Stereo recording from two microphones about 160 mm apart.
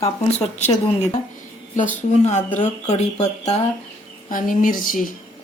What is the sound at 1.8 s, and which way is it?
Speech, 50° left (ahead or behind).